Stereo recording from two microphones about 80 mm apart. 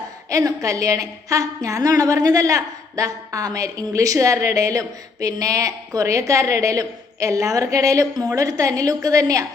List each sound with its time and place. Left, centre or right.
0.3 s a woman's voice: right